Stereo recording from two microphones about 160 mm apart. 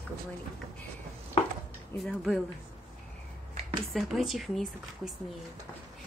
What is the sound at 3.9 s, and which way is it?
Speech, centre (ahead or behind).